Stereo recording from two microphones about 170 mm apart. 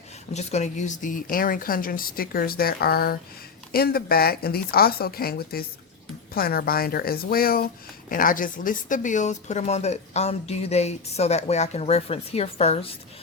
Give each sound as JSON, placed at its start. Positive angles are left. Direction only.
{"t": 0.3, "sound": "a woman's voice", "side_deg": 40}